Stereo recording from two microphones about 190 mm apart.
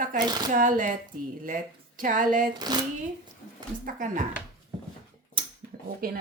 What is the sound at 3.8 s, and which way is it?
Speech, 45° right (ahead or behind).